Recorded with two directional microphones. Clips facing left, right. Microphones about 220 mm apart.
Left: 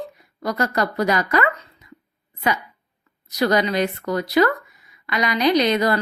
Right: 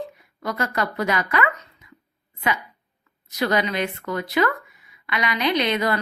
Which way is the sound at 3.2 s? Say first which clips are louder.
Left 3 dB; 40° left (ahead or behind).